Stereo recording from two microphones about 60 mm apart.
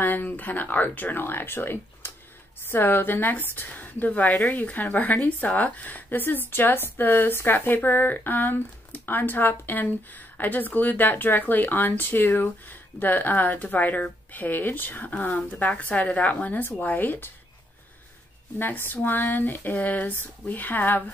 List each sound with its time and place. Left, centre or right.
0.0 s a woman's voice: left
18.6 s a woman's voice: left